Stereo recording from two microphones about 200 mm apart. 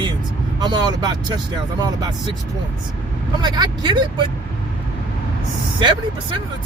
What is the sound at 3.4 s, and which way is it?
Speech, 20° right (ahead or behind).